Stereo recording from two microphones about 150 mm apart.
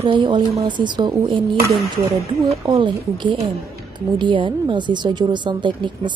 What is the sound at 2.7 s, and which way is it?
A woman's voice, 35° right (ahead or behind).